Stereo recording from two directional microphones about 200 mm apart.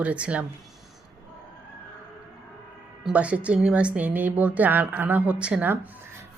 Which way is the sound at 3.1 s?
5° right (ahead or behind).